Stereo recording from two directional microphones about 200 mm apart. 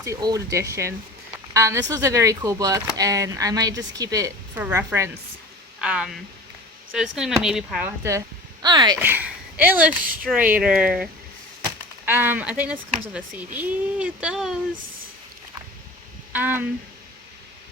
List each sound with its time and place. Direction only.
0.0 s a woman's voice: 15° right (ahead or behind)
9.0 s a woman's voice: 10° right (ahead or behind)
16.3 s a woman's voice: 10° right (ahead or behind)